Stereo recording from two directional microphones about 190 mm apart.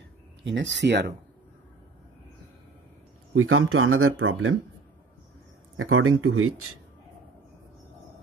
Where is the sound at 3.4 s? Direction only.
90° right.